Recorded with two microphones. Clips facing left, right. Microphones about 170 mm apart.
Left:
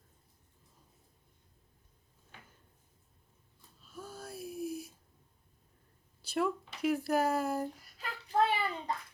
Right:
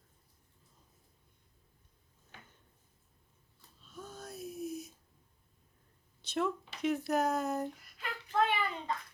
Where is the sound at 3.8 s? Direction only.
5° left (ahead or behind).